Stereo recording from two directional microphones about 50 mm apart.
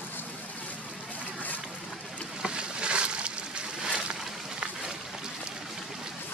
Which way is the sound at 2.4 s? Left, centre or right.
Centre.